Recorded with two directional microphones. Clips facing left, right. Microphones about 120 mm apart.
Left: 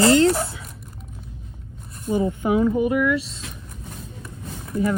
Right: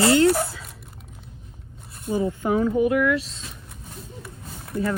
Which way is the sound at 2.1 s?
25° left (ahead or behind).